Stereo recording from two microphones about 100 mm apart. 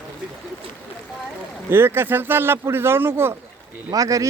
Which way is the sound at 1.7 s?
25° right (ahead or behind).